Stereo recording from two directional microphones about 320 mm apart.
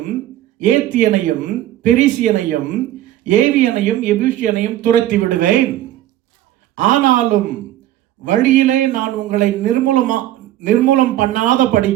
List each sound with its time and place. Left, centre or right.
0.6 s speech: right
6.7 s speech: right